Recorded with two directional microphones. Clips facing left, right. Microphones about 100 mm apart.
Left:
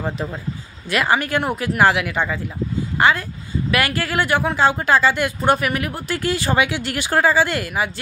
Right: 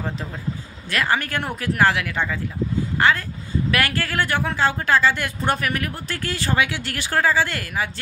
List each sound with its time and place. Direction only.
0.8 s speech: 15° left (ahead or behind)